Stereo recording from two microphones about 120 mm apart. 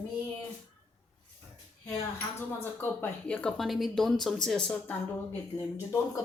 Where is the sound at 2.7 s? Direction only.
15° left (ahead or behind).